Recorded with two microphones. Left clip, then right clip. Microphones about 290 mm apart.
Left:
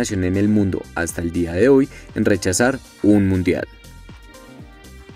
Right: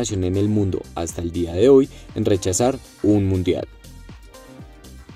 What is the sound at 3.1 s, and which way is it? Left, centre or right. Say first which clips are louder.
Speech: left 3 dB; left.